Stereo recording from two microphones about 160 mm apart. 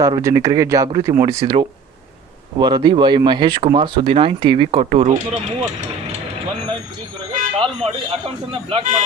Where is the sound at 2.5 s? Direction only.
25° right (ahead or behind); by 5.1 s 45° right (ahead or behind).